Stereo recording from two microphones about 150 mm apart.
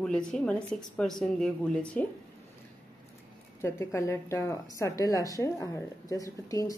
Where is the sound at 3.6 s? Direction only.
20° left (ahead or behind).